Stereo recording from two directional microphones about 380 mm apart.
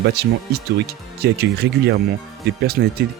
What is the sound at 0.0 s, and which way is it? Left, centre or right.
Speech, right.